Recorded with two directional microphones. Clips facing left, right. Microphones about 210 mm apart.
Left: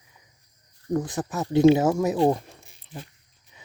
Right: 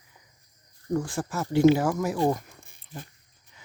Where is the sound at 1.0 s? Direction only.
20° left (ahead or behind).